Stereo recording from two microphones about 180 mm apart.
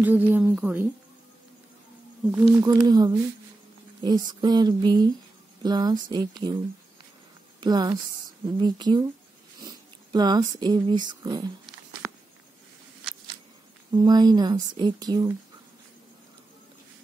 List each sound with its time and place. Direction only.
0.0 s speech: 10° right (ahead or behind)
2.6 s speech: 20° right (ahead or behind)
7.6 s speech: 20° right (ahead or behind)
10.1 s speech: 20° right (ahead or behind)
13.9 s speech: 20° right (ahead or behind)